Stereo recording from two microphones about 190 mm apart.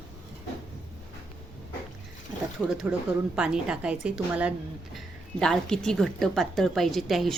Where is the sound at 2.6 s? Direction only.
5° right (ahead or behind).